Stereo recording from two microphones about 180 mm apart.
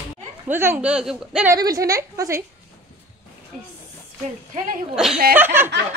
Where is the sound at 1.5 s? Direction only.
20° right (ahead or behind).